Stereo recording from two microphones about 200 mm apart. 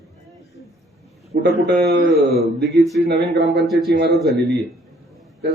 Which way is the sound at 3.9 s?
55° right (ahead or behind).